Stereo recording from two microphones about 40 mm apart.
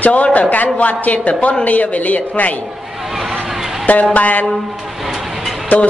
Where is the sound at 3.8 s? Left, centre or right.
Left.